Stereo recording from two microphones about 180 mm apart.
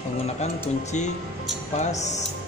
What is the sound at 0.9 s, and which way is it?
Speech, 40° left (ahead or behind).